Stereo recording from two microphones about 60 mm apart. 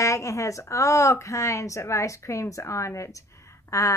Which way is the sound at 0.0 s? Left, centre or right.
Left.